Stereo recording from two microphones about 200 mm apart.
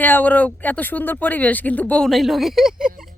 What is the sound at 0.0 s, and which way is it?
Speech, 10° left (ahead or behind).